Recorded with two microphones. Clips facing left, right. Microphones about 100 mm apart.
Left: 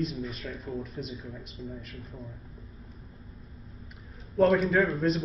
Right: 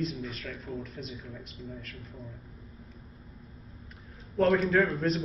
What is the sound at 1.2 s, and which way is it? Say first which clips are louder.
Speech: left 2 dB; centre (ahead or behind).